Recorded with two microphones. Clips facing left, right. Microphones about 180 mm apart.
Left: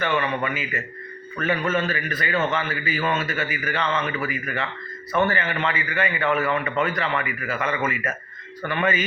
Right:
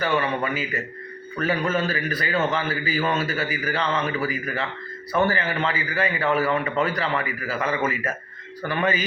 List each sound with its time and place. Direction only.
0.2 s a man's voice: 35° right (ahead or behind)
8.8 s a man's voice: 35° right (ahead or behind)